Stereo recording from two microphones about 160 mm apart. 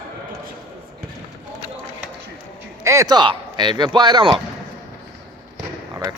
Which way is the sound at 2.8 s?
20° right (ahead or behind).